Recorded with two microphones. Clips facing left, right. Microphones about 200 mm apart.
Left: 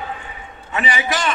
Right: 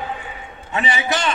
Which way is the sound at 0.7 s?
25° right (ahead or behind).